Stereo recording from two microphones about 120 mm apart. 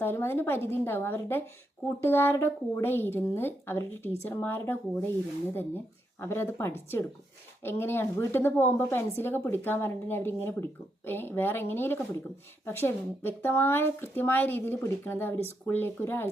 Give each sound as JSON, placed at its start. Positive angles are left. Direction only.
{"t": 0.0, "sound": "a woman's voice", "side_deg": 20}